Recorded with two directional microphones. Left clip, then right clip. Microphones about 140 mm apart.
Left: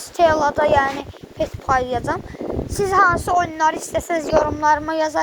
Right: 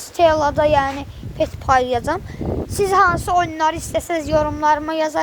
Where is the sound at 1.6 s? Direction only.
60° right (ahead or behind); by 3.1 s 45° right (ahead or behind).